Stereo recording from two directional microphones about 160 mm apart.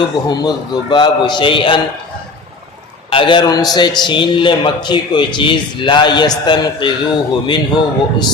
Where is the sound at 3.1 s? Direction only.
30° left (ahead or behind).